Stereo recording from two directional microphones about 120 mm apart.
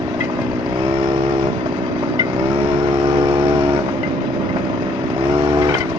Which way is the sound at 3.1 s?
35° right (ahead or behind).